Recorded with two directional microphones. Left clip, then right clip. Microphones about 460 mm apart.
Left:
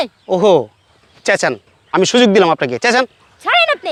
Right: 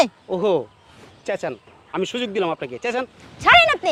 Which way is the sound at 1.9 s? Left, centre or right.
Left.